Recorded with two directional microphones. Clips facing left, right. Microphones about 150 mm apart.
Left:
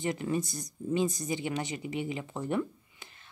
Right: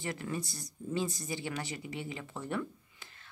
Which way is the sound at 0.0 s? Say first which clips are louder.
Left 6 dB; 20° left (ahead or behind).